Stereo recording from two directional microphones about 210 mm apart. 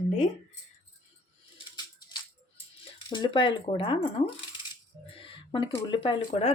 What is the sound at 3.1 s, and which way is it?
Speech, 20° left (ahead or behind).